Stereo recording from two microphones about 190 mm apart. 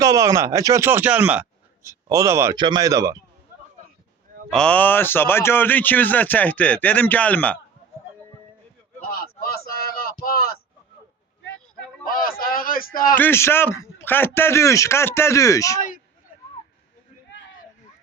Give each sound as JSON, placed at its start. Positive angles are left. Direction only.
{"t": 0.0, "sound": "a man's voice", "side_deg": -20}
{"t": 4.5, "sound": "speech", "side_deg": 5}
{"t": 9.0, "sound": "a sound", "side_deg": 50}
{"t": 12.0, "sound": "speech", "side_deg": 50}
{"t": 13.1, "sound": "speech", "side_deg": 10}